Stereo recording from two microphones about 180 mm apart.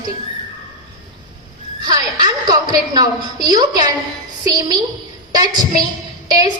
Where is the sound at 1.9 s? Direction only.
20° right (ahead or behind).